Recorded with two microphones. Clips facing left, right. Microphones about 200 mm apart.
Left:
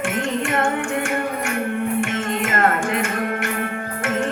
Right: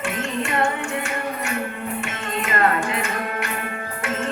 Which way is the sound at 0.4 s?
50° left (ahead or behind).